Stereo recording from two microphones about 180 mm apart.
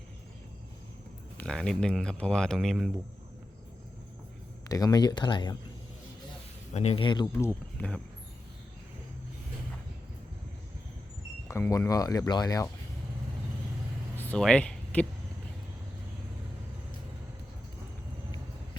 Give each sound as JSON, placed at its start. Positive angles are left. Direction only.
{"t": 1.4, "sound": "speech", "side_deg": 5}
{"t": 4.7, "sound": "speech", "side_deg": 20}
{"t": 6.7, "sound": "speech", "side_deg": 35}
{"t": 7.3, "sound": "speech", "side_deg": 10}
{"t": 11.4, "sound": "speech", "side_deg": 15}
{"t": 14.2, "sound": "a sound", "side_deg": 5}